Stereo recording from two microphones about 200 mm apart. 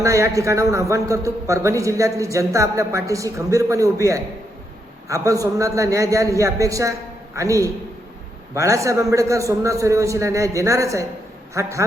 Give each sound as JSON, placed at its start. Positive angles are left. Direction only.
{"t": 0.0, "sound": "a man's voice", "side_deg": -15}